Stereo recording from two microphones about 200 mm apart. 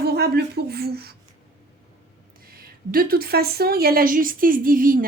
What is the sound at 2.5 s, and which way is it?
Speech, 50° right (ahead or behind).